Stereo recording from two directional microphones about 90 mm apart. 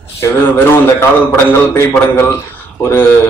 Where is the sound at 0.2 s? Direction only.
25° left (ahead or behind).